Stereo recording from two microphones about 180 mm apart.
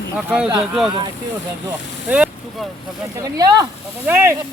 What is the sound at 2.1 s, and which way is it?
Boat, 5° right (ahead or behind).